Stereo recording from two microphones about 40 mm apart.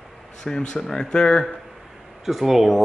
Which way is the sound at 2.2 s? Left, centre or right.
Centre.